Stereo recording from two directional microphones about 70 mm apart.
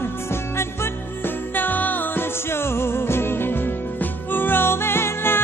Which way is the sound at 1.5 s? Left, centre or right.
Left.